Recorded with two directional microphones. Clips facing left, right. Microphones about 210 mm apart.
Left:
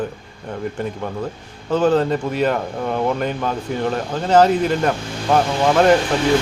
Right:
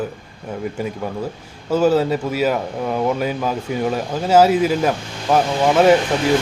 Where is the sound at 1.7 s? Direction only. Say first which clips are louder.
Right 1 dB; 10° right (ahead or behind).